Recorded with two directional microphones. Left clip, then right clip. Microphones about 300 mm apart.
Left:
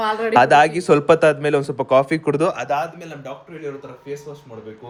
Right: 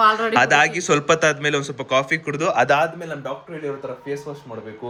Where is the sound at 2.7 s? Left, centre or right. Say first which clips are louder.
Right 4 dB; right.